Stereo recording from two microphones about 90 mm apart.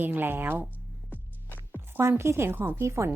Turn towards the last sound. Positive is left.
turn(degrees=-35)  # may be behind; listen again after turning